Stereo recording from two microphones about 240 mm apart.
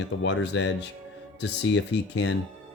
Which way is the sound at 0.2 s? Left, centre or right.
Left.